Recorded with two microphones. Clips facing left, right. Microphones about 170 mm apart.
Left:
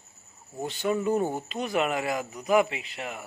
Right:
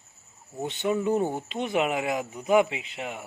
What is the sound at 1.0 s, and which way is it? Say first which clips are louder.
Speech: right 1 dB; 15° right (ahead or behind).